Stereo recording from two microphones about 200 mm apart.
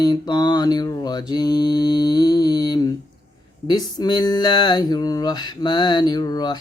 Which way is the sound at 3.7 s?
20° left (ahead or behind).